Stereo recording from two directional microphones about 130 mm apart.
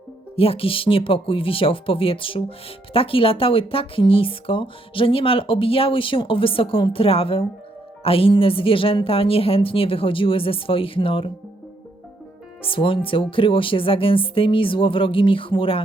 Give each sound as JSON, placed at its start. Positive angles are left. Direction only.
{"t": 0.3, "sound": "speech", "side_deg": 45}
{"t": 12.6, "sound": "speech", "side_deg": 45}